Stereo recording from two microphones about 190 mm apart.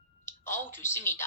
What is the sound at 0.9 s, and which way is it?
Speech, 10° left (ahead or behind).